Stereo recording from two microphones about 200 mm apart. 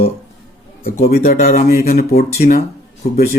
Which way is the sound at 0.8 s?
50° left (ahead or behind).